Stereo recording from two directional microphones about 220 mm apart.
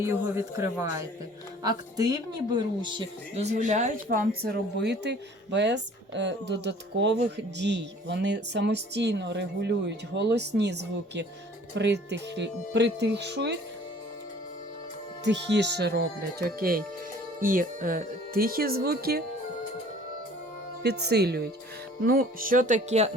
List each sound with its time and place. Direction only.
0.0 s speech: 10° right (ahead or behind); by 13.6 s 50° right (ahead or behind)
15.2 s speech: 50° right (ahead or behind)
21.1 s speech: 50° right (ahead or behind); by 23.1 s 30° right (ahead or behind)